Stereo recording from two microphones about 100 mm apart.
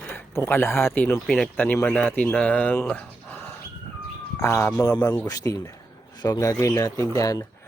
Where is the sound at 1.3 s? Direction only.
5° left (ahead or behind).